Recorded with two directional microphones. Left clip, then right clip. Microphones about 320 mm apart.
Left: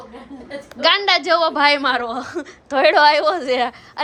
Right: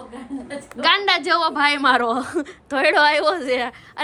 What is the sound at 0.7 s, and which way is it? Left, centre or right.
A woman's voice, centre.